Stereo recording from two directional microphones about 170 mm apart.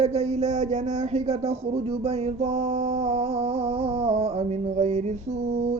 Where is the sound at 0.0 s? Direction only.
40° right (ahead or behind).